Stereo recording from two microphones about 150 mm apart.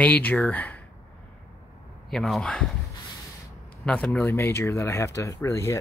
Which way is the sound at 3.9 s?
10° left (ahead or behind).